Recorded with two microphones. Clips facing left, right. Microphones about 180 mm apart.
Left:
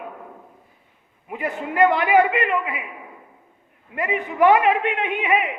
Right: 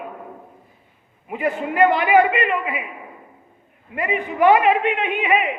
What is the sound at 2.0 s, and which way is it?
Speech, 15° right (ahead or behind).